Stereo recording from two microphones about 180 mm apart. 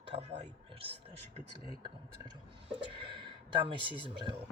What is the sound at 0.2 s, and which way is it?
Speech, 35° right (ahead or behind).